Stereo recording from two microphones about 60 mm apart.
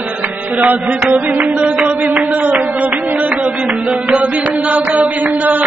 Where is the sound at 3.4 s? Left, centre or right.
Right.